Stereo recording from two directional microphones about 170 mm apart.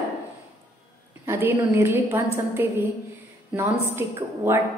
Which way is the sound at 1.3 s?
15° right (ahead or behind).